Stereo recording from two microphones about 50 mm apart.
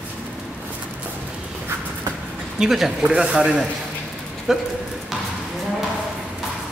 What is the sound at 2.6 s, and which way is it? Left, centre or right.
Speech, centre.